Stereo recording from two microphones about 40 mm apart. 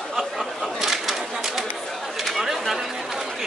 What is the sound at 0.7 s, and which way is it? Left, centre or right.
Bird, centre.